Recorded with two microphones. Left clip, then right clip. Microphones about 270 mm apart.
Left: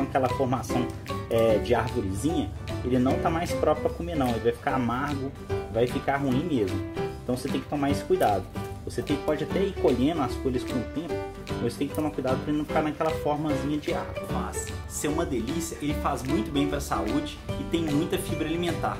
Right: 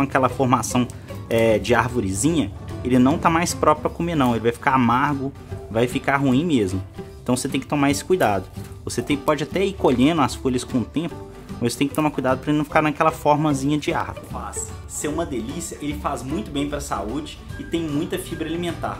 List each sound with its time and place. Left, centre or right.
0.1 s speech: centre
15.0 s speech: centre